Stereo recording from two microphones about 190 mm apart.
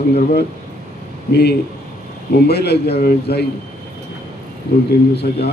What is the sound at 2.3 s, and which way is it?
Speech, 60° left (ahead or behind).